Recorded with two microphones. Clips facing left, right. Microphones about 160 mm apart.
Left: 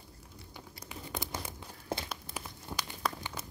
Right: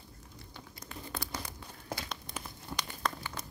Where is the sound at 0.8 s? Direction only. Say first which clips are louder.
Left 1 dB; 20° left (ahead or behind).